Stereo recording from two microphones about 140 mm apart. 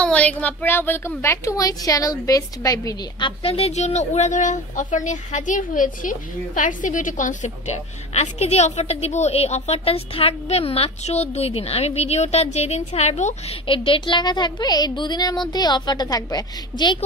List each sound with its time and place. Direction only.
0.0 s a woman's voice: 10° left (ahead or behind); by 3.3 s 25° left (ahead or behind)
3.3 s a woman's voice: 45° left (ahead or behind)
13.7 s speech: 40° left (ahead or behind)